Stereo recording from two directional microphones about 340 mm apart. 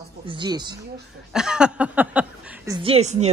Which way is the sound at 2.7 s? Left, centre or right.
Centre.